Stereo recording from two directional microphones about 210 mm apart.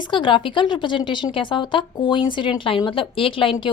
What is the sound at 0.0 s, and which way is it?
A woman's voice, 25° left (ahead or behind).